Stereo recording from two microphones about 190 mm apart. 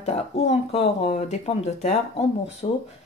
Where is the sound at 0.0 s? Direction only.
35° left (ahead or behind).